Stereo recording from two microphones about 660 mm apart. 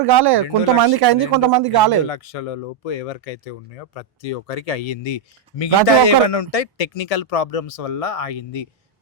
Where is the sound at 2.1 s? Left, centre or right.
Left.